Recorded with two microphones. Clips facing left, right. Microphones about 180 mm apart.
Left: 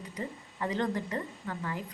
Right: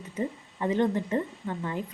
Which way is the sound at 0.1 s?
20° right (ahead or behind).